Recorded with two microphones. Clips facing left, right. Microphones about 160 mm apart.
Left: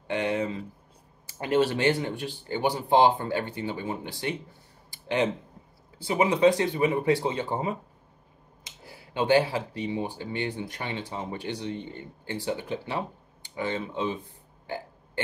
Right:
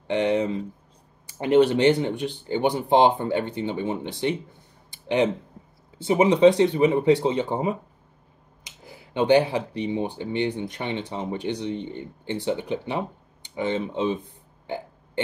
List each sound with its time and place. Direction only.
0.1 s speech: 20° right (ahead or behind)
8.8 s a sound: 20° right (ahead or behind)
9.8 s speech: 20° right (ahead or behind)